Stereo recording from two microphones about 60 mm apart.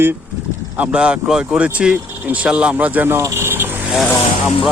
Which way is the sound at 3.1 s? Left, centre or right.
Right.